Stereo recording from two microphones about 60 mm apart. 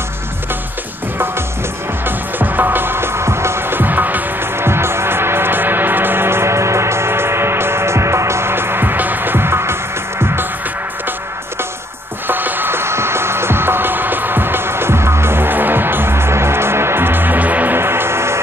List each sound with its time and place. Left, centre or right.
2.0 s music: right
4.6 s music: right
12.3 s music: right
17.7 s music: right